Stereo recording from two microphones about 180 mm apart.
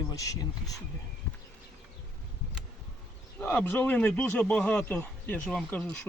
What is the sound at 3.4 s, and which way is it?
Speech, 10° left (ahead or behind).